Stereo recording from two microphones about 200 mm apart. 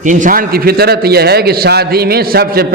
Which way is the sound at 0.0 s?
40° right (ahead or behind).